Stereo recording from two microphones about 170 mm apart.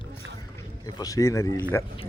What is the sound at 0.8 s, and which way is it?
Speech, 20° left (ahead or behind).